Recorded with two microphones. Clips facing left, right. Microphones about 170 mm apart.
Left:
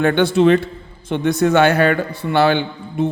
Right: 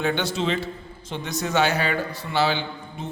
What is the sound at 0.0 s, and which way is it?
A man's voice, 60° left (ahead or behind).